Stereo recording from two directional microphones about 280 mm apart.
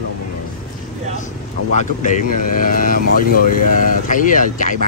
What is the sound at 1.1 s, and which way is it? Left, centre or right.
Speech, left.